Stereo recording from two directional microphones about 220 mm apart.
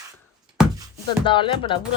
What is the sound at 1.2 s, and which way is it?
Speech, 20° left (ahead or behind).